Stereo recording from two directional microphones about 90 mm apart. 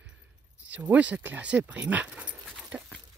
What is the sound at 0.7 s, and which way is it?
Speech, 15° right (ahead or behind).